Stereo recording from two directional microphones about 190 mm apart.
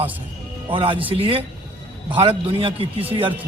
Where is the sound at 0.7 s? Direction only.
25° right (ahead or behind).